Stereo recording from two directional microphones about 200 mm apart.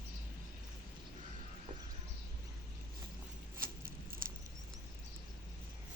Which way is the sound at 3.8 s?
45° right (ahead or behind).